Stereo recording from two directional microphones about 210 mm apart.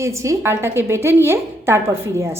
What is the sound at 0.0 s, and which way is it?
A woman's voice, 15° right (ahead or behind).